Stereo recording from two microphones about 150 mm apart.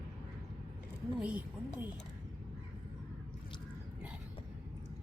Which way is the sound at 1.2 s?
10° right (ahead or behind).